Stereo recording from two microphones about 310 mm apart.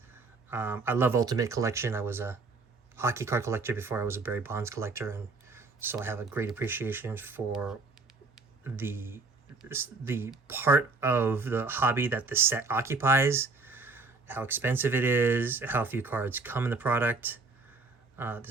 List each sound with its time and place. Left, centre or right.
0.5 s speech: centre